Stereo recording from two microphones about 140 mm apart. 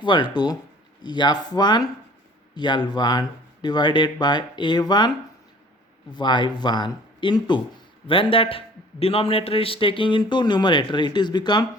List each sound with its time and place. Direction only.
0.0 s speech: 35° left (ahead or behind)